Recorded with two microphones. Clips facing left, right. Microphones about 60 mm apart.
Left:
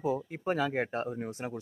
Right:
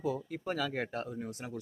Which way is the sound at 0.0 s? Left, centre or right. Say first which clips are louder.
Left 4 dB; left.